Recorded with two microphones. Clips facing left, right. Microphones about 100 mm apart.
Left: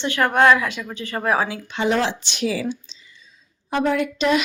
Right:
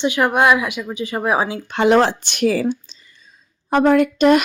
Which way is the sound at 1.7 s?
60° right (ahead or behind).